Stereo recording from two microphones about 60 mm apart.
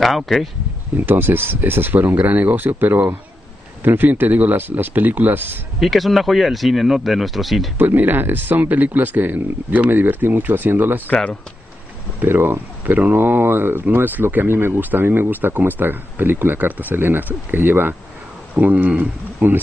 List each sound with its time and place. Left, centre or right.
0.0 s speech: centre
0.9 s speech: right
5.8 s speech: centre
7.7 s speech: right
12.2 s speech: right